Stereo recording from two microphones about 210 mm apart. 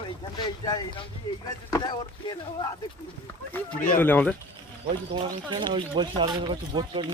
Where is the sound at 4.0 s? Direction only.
10° left (ahead or behind).